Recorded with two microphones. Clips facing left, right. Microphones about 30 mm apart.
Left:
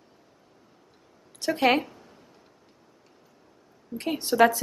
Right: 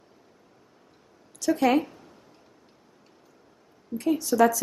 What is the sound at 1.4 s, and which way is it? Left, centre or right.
Speech, left.